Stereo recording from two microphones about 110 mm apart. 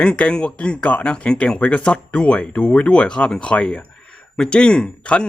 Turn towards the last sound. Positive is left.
turn(degrees=10)  # may be behind; listen again after turning